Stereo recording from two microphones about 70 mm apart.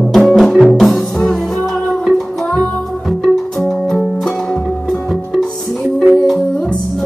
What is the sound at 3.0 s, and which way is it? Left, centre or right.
Music, centre.